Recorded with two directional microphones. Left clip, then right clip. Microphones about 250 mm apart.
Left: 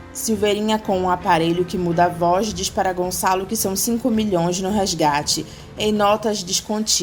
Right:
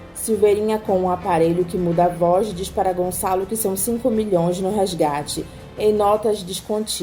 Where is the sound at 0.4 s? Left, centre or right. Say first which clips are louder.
Right 2 dB; left.